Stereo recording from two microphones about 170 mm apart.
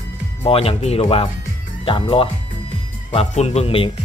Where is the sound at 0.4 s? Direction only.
35° left (ahead or behind).